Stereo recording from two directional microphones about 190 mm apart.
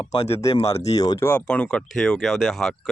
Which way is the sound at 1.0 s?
15° left (ahead or behind).